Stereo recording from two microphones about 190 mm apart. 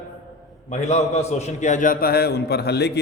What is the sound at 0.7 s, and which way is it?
A man's voice, 35° left (ahead or behind).